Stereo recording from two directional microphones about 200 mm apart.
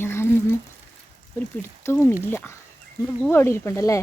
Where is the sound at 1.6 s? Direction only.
10° left (ahead or behind).